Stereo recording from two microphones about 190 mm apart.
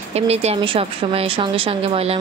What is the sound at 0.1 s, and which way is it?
A woman's voice, 35° right (ahead or behind).